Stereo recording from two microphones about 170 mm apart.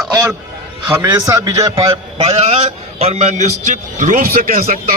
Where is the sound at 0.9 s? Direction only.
15° right (ahead or behind).